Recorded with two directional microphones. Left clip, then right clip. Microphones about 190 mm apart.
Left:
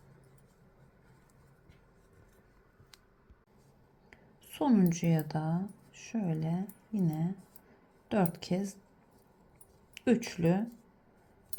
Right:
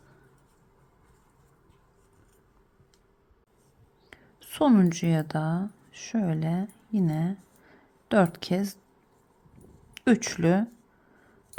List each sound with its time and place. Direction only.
4.1 s speech: 20° right (ahead or behind)
9.9 s speech: 20° right (ahead or behind)